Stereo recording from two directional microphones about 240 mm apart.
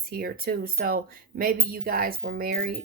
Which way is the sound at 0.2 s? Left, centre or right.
Right.